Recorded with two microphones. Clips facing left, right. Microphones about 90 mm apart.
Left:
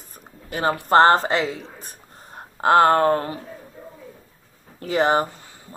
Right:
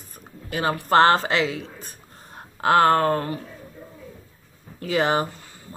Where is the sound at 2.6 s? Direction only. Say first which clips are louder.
Left 2 dB; 30° left (ahead or behind).